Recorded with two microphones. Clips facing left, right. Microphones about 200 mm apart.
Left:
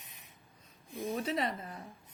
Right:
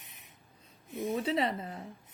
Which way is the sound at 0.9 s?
25° right (ahead or behind).